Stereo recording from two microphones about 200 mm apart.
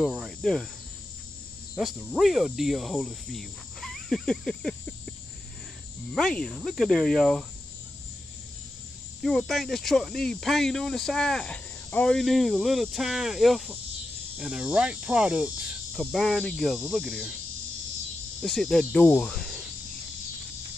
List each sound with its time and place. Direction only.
0.0 s speech: centre (ahead or behind)
1.8 s speech: centre (ahead or behind)
6.1 s speech: centre (ahead or behind)
9.2 s speech: centre (ahead or behind)
18.4 s speech: centre (ahead or behind)